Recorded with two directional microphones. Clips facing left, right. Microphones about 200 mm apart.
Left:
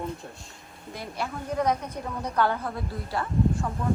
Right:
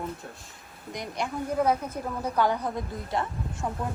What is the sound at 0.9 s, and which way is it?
A woman's voice, 15° right (ahead or behind).